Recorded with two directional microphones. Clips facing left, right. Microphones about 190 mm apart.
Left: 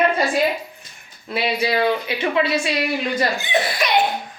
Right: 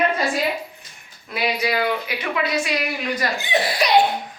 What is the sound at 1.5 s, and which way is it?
Speech, 30° left (ahead or behind).